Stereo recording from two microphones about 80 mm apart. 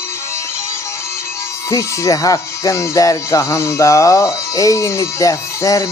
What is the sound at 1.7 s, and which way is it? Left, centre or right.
Speech, left.